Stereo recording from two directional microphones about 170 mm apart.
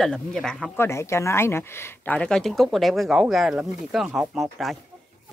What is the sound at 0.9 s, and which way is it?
Speech, 15° left (ahead or behind).